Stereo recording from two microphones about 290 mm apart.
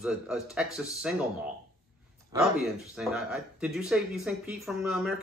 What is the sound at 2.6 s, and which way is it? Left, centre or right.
Speech, centre.